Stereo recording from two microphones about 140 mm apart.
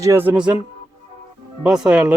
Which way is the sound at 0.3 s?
10° right (ahead or behind).